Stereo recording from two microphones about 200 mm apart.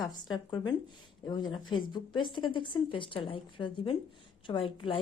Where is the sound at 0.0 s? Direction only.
20° left (ahead or behind).